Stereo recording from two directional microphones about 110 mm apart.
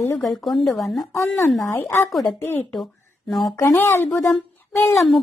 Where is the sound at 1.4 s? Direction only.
25° left (ahead or behind).